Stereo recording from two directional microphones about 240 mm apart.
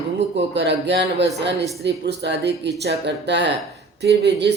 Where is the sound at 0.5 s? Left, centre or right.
Right.